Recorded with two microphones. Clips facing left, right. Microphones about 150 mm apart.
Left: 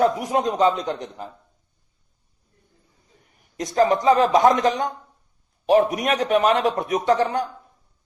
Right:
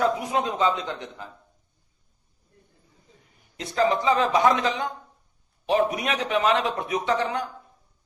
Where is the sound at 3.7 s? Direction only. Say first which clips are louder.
Left 5 dB; 45° left (ahead or behind).